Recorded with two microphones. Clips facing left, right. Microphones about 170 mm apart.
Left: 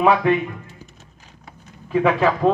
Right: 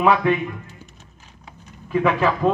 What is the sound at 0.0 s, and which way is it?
Speech, 40° left (ahead or behind).